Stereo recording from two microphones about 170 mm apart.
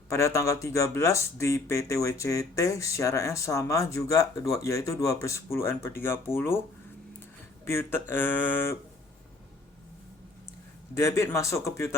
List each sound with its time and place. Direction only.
0.1 s speech: 15° left (ahead or behind)
7.6 s speech: 15° left (ahead or behind)
10.9 s speech: 15° left (ahead or behind)